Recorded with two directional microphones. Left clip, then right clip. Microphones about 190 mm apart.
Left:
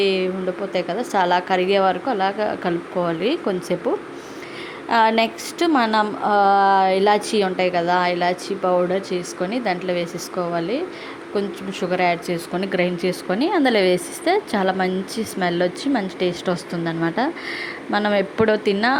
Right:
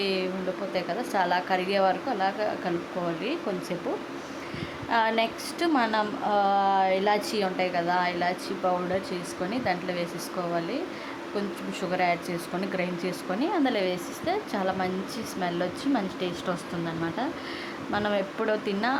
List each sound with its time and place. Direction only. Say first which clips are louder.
0.0 s speech: left 8 dB; 20° left (ahead or behind)
4.9 s speech: left 8 dB; 25° left (ahead or behind)